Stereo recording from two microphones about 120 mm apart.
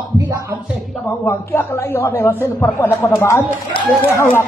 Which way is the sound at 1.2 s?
20° left (ahead or behind).